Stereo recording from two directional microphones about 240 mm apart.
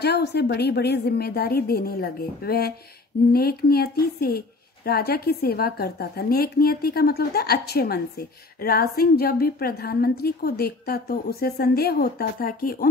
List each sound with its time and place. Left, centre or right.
0.0 s a woman's voice: left